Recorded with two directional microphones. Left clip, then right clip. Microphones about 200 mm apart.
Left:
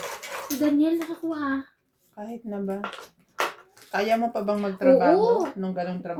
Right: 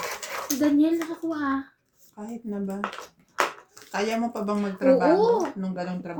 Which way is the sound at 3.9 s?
35° left (ahead or behind).